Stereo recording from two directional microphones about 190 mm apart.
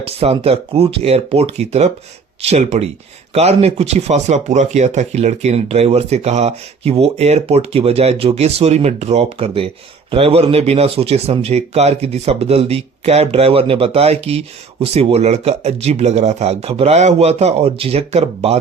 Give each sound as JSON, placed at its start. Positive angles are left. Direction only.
{"t": 0.0, "sound": "speech", "side_deg": -30}